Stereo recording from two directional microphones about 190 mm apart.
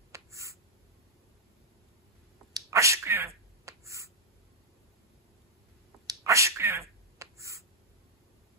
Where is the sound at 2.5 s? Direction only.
15° right (ahead or behind).